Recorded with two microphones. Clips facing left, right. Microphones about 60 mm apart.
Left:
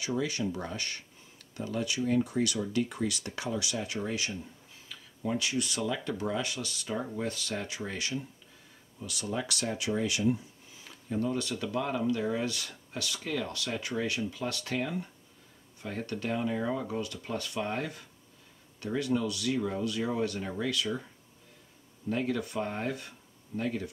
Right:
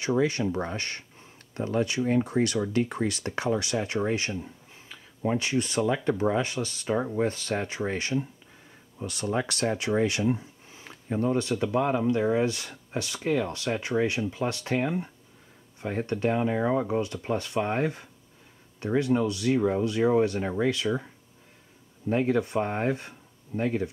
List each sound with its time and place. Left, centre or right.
0.0 s speech: right
22.1 s speech: right